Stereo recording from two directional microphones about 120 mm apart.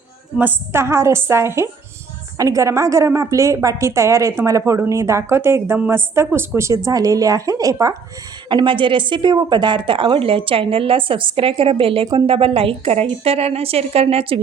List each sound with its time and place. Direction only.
0.3 s a woman's voice: 20° right (ahead or behind)
8.4 s a woman's voice: 40° right (ahead or behind)